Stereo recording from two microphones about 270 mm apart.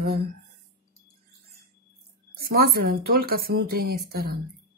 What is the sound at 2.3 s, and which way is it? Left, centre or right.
Speech, right.